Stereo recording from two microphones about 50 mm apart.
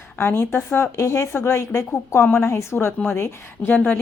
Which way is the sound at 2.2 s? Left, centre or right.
Left.